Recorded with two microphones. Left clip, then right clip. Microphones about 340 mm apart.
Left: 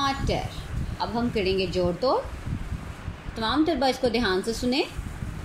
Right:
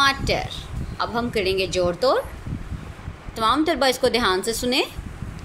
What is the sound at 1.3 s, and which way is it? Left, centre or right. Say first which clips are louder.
Speech: right 3 dB; right.